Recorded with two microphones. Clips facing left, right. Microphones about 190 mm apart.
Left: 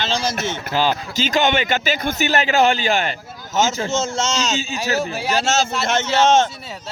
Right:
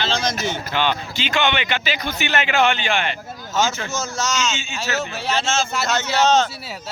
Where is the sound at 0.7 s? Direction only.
35° left (ahead or behind).